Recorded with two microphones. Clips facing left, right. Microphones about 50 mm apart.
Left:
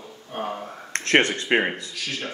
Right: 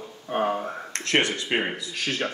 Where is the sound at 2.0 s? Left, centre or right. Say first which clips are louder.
Right 4 dB; right.